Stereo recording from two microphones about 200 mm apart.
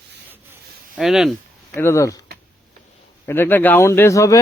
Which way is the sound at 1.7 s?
15° left (ahead or behind).